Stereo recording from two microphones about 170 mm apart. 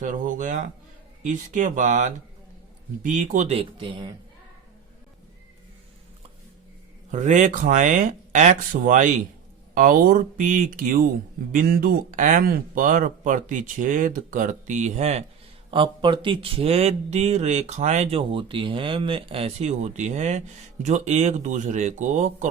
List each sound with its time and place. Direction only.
0.0 s speech: 50° right (ahead or behind); by 4.1 s 30° right (ahead or behind)
7.1 s speech: 45° right (ahead or behind)
15.7 s speech: 30° right (ahead or behind); by 22.4 s 45° right (ahead or behind)